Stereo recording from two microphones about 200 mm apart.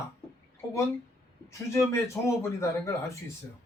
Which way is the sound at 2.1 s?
15° left (ahead or behind).